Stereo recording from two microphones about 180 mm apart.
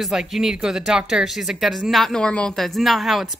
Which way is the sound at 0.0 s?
Centre (ahead or behind).